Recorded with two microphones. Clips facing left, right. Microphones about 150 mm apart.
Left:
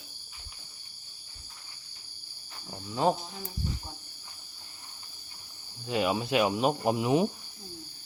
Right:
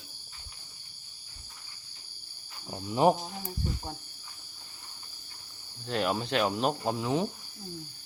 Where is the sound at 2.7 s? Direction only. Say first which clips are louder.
Right 3 dB; 20° right (ahead or behind).